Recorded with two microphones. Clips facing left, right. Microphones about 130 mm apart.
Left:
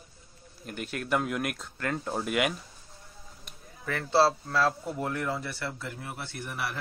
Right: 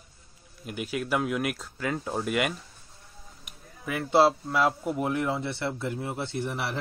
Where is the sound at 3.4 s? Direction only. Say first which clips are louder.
Even; 15° right (ahead or behind).